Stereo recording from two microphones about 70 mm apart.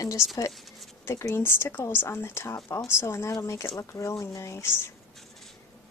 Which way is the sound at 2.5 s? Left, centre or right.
Left.